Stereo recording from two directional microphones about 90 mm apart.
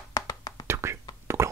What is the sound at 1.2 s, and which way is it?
Plop, 30° right (ahead or behind).